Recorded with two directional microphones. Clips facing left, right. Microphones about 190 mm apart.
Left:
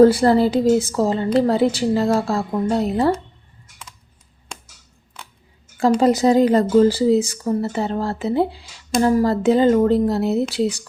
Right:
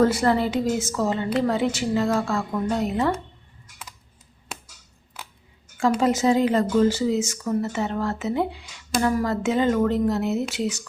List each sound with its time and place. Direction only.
0.0 s speech: 35° left (ahead or behind)
5.2 s scissors: 5° right (ahead or behind)
6.0 s speech: 35° left (ahead or behind)